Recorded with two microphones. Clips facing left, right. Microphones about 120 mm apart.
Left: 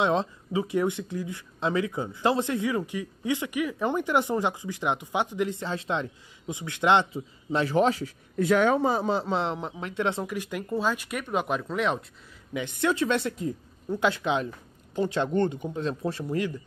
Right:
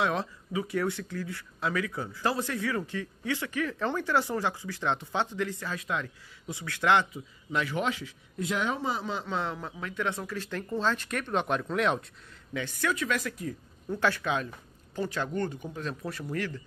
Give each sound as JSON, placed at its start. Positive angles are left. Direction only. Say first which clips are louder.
{"t": 0.0, "sound": "speech", "louder": "left 4 dB", "side_deg": 20}
{"t": 12.5, "sound": "speech", "louder": "left 5 dB", "side_deg": 20}